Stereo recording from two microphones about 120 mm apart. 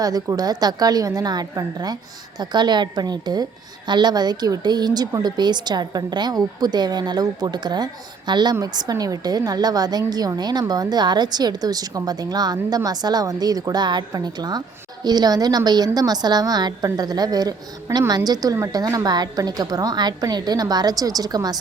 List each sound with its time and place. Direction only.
0.0 s a woman's voice: 30° right (ahead or behind)